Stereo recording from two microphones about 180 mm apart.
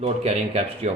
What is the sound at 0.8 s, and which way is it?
Speech, 35° right (ahead or behind).